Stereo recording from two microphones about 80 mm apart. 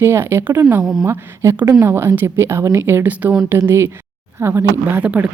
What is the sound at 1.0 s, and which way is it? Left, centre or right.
Speech, right.